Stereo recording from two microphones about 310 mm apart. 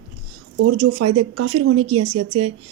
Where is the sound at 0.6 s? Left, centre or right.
Right.